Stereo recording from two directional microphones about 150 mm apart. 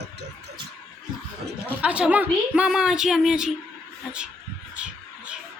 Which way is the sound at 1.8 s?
10° right (ahead or behind).